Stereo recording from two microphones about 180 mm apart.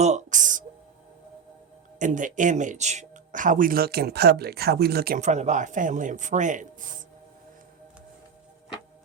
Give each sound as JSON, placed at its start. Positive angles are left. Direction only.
{"t": 0.0, "sound": "music", "side_deg": -40}
{"t": 2.0, "sound": "speech", "side_deg": -45}
{"t": 5.2, "sound": "speech", "side_deg": -40}